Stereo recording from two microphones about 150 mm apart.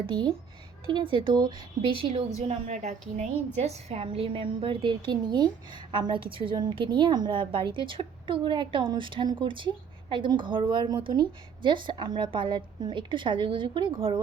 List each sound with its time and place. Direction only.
0.0 s a woman's voice: 35° right (ahead or behind)
2.5 s a woman's voice: 50° right (ahead or behind)